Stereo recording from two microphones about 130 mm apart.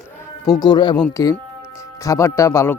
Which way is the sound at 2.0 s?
25° left (ahead or behind).